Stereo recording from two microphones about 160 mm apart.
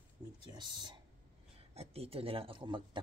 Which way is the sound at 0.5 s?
30° right (ahead or behind).